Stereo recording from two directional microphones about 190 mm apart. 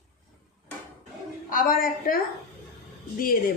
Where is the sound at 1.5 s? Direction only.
45° left (ahead or behind).